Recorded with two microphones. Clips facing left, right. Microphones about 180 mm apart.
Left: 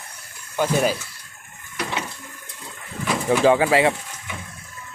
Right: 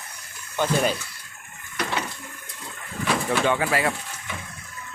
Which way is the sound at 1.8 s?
15° left (ahead or behind).